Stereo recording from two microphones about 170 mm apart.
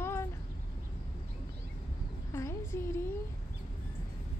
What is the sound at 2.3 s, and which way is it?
Speech, 15° left (ahead or behind).